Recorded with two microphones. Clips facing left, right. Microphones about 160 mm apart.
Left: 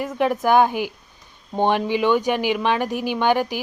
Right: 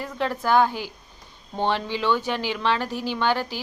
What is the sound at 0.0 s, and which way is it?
A woman's voice, 15° left (ahead or behind).